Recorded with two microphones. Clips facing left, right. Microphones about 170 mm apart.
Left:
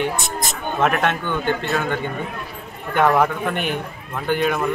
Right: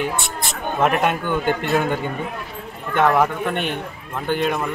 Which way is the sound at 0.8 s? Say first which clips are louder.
Right 1 dB; 10° right (ahead or behind).